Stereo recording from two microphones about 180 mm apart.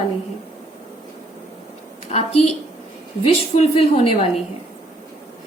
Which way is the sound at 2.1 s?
35° left (ahead or behind).